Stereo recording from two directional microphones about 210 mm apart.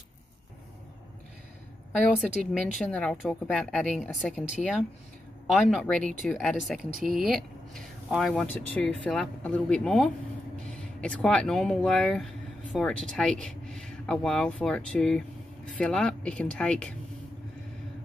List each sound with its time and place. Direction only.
1.9 s speech: centre (ahead or behind)
5.5 s speech: centre (ahead or behind)